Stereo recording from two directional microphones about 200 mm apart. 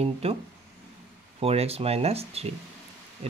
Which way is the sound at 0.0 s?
30° right (ahead or behind).